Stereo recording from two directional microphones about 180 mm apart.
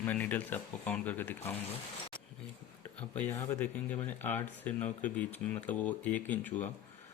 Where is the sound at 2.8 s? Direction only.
10° left (ahead or behind).